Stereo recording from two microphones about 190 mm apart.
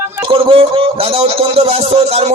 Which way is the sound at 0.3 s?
30° right (ahead or behind).